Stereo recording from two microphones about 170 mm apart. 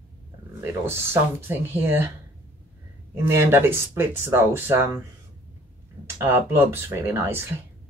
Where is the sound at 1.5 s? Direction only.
15° right (ahead or behind).